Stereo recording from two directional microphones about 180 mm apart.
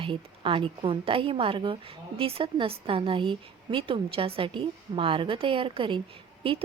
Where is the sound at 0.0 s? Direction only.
30° right (ahead or behind).